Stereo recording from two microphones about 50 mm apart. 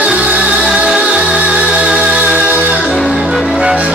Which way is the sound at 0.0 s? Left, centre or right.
Right.